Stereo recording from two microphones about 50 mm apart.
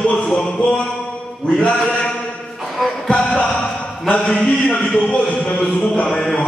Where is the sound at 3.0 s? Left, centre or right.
Centre.